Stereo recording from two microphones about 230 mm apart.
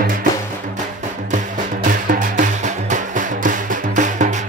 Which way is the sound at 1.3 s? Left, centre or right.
Right.